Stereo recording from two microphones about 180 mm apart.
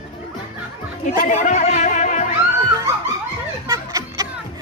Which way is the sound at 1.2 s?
45° left (ahead or behind).